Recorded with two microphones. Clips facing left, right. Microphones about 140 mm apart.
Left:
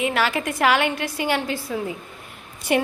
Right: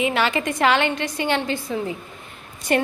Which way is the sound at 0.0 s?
Centre (ahead or behind).